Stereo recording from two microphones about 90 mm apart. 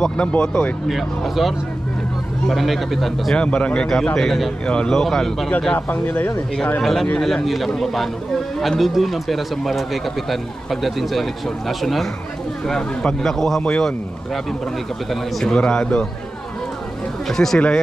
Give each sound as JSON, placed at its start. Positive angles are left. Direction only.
{"t": 0.0, "sound": "a man's voice", "side_deg": 10}
{"t": 0.8, "sound": "speech", "side_deg": 0}
{"t": 3.3, "sound": "speech", "side_deg": 10}
{"t": 5.8, "sound": "speech", "side_deg": 20}
{"t": 6.8, "sound": "a man's voice", "side_deg": 5}
{"t": 17.3, "sound": "speech", "side_deg": 5}